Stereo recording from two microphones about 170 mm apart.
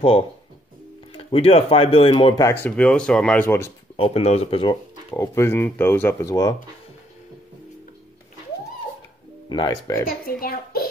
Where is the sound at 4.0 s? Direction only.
35° left (ahead or behind).